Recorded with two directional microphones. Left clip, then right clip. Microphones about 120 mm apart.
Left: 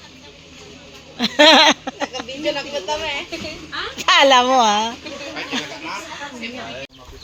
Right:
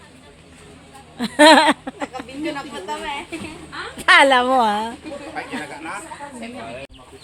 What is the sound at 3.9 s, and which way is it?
Speech, 25° right (ahead or behind).